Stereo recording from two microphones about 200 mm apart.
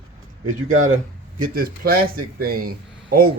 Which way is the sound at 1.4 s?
45° right (ahead or behind).